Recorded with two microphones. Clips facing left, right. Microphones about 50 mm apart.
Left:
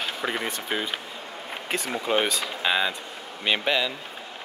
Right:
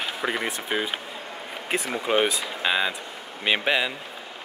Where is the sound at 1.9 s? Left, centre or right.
Centre.